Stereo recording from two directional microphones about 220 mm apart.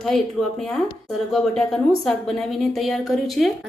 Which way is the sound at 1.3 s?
Centre (ahead or behind).